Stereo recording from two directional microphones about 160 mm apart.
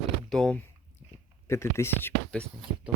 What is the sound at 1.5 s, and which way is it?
Speech, 15° left (ahead or behind).